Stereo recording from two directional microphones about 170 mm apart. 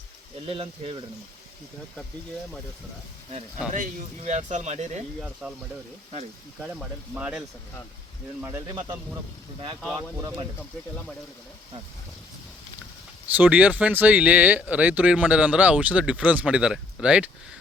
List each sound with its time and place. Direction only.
0.4 s speech: 35° right (ahead or behind)
3.7 s speech: 45° right (ahead or behind)
5.2 s speech: 5° right (ahead or behind)
6.6 s speech: 5° right (ahead or behind)
13.3 s speech: 10° right (ahead or behind)